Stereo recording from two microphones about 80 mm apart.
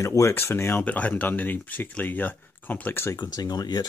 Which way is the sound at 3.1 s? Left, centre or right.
Left.